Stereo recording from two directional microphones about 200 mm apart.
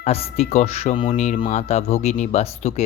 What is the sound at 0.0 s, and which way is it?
Speech, 30° left (ahead or behind).